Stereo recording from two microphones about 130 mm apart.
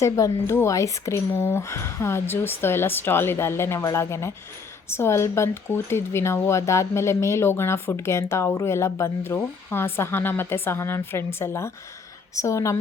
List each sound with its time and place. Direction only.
0.0 s speech: 20° left (ahead or behind)